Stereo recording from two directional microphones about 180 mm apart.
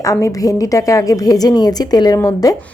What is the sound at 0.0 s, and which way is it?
Speech, 15° left (ahead or behind).